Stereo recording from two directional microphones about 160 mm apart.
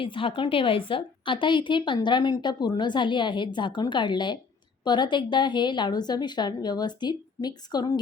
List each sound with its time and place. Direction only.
0.0 s a woman's voice: 30° left (ahead or behind)